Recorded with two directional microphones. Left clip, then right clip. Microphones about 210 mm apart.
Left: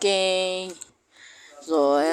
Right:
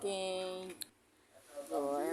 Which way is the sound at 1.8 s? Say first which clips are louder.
Left 17 dB; 45° left (ahead or behind).